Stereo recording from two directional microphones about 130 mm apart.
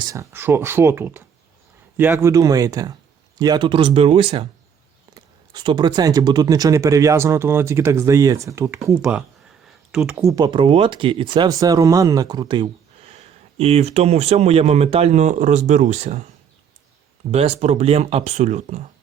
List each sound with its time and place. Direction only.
0.0 s speech: 25° right (ahead or behind)
0.3 s speech: 15° right (ahead or behind)
9.0 s speech: 5° right (ahead or behind)
10.2 s speech: 25° right (ahead or behind)
11.4 s speech: 25° right (ahead or behind)
13.0 s speech: 50° right (ahead or behind)
17.3 s speech: 50° right (ahead or behind)